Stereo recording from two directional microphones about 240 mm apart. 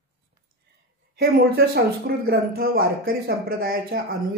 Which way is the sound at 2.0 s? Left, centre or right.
Right.